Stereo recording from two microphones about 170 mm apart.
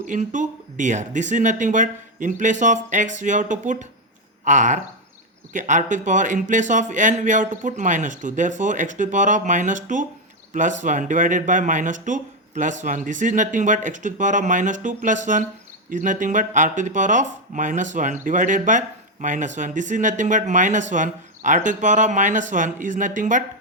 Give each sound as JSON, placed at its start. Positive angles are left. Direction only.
{"t": 0.1, "sound": "speech", "side_deg": -45}